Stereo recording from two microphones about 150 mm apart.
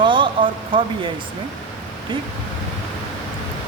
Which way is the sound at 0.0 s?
35° right (ahead or behind).